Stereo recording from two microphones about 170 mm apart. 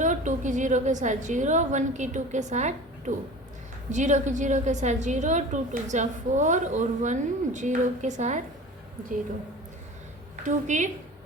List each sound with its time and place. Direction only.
0.0 s a woman's voice: 45° right (ahead or behind)
3.9 s a woman's voice: 45° right (ahead or behind)
10.4 s a woman's voice: 45° right (ahead or behind)